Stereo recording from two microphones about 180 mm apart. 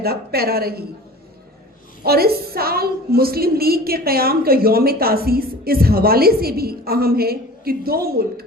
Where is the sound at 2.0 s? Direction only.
60° right (ahead or behind).